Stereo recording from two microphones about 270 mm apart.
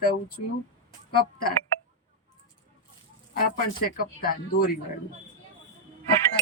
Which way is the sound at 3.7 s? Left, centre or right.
Left.